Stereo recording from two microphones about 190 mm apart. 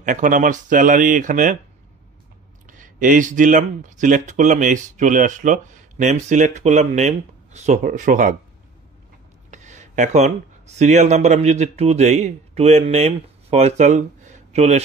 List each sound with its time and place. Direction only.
0.0 s speech: 45° right (ahead or behind)
2.6 s speech: 45° right (ahead or behind)
9.5 s a sound: 40° right (ahead or behind)
10.8 s speech: 35° right (ahead or behind)